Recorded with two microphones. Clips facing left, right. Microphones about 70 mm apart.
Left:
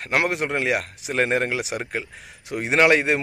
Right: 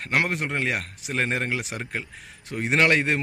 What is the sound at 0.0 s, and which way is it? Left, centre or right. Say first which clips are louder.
Speech: left 2 dB; centre.